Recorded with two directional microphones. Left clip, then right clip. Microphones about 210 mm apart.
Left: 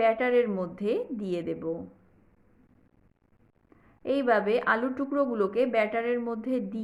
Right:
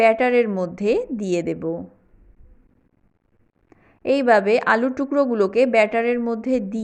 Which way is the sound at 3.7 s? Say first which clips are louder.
Right 8 dB; 35° right (ahead or behind).